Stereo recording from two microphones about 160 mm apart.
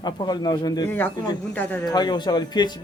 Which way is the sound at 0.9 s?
10° left (ahead or behind).